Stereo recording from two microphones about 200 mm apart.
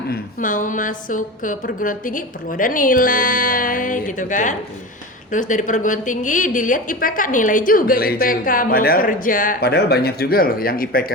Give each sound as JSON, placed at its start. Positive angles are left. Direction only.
{"t": 0.1, "sound": "a woman's voice", "side_deg": 40}